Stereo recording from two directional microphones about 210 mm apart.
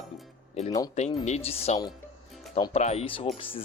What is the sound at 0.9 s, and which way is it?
Speech, 30° left (ahead or behind).